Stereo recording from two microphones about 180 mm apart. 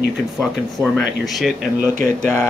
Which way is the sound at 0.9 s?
Centre (ahead or behind).